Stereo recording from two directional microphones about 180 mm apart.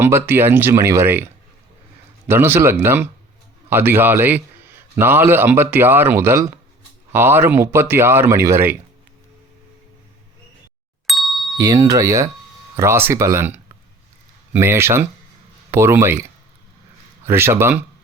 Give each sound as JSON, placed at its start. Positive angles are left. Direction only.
{"t": 0.0, "sound": "a man's voice", "side_deg": -10}
{"t": 11.0, "sound": "ding", "side_deg": 0}
{"t": 11.5, "sound": "a man's voice", "side_deg": -20}
{"t": 17.2, "sound": "a man's voice", "side_deg": -15}